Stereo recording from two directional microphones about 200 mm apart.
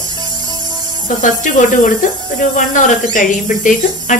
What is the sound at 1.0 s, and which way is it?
Speech, 40° left (ahead or behind).